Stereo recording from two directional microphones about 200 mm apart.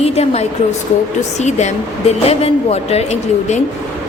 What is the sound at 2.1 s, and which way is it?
A woman's voice, 30° left (ahead or behind).